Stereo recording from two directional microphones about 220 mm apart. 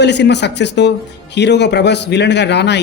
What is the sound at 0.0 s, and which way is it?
Speech, 50° left (ahead or behind).